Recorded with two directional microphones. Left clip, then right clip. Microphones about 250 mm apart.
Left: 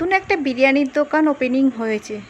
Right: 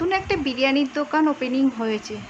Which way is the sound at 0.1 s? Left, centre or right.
Centre.